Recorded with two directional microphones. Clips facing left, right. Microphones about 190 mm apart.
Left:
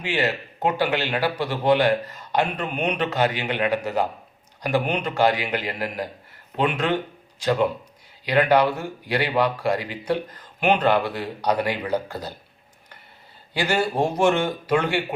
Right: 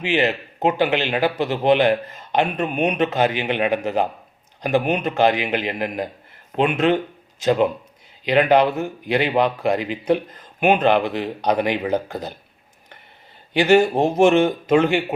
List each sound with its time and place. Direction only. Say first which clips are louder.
0.0 s a man's voice: right 4 dB; 20° right (ahead or behind)
7.3 s a man's voice: right 3 dB; 20° right (ahead or behind)
13.5 s a man's voice: right 8 dB; 20° right (ahead or behind)